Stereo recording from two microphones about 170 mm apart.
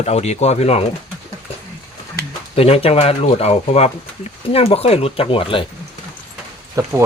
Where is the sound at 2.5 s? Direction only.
35° left (ahead or behind).